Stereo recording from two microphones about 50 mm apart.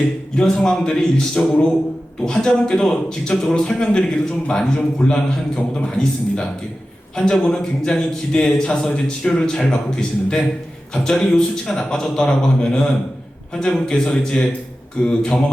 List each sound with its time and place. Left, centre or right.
0.3 s a man's voice: centre